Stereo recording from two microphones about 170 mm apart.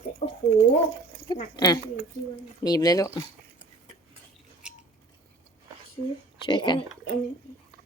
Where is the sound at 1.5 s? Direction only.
25° left (ahead or behind).